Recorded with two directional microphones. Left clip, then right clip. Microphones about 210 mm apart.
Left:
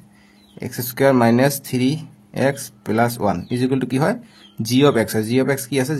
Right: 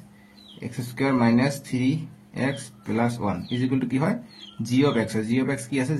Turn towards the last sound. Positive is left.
turn(degrees=45)  # may be behind; listen again after turning